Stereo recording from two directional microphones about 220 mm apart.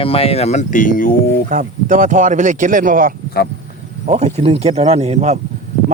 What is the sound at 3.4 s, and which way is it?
Speech, 45° left (ahead or behind).